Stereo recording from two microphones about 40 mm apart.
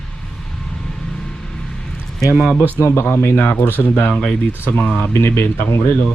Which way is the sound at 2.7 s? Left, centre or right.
Left.